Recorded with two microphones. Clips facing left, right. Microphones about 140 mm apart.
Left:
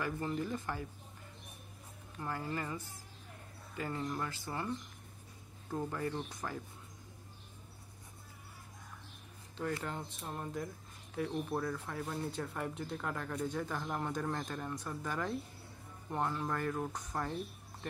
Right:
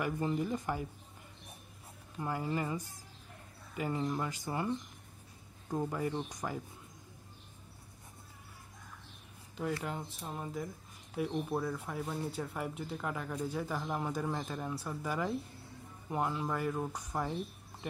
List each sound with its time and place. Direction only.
0.0 s speech: 15° right (ahead or behind)
2.1 s speech: 15° right (ahead or behind)
9.8 s speech: 5° right (ahead or behind)